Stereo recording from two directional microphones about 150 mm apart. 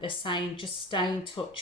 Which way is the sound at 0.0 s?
35° left (ahead or behind).